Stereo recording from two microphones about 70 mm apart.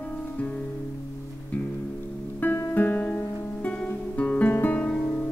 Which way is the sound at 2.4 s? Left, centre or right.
Left.